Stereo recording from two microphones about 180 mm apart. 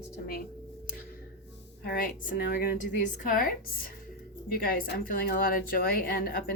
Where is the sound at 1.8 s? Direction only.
55° left (ahead or behind).